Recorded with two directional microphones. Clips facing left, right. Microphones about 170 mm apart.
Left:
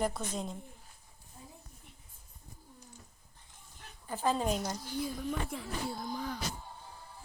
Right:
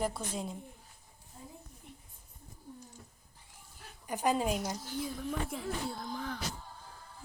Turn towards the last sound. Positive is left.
turn(degrees=15)  # may be behind; listen again after turning